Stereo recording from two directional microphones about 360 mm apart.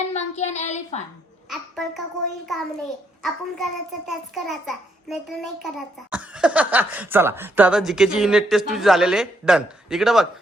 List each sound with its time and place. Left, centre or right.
0.1 s a sound: centre
1.5 s babbling: centre
3.2 s a child's voice: centre